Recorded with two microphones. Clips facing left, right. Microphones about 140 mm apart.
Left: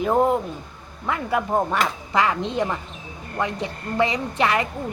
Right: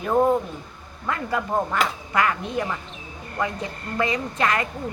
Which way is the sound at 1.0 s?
15° left (ahead or behind).